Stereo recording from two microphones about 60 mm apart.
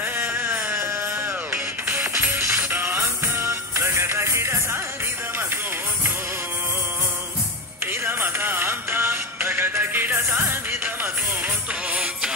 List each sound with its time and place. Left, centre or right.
0.2 s music: right
2.3 s music: right
7.8 s music: right
11.9 s music: centre